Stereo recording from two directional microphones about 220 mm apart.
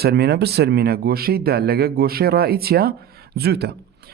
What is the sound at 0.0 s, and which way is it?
Speech, 45° right (ahead or behind).